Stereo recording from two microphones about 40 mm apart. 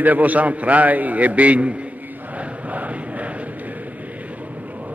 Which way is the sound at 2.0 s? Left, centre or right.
Right.